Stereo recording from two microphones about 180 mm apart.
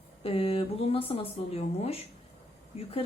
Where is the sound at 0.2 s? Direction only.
30° left (ahead or behind).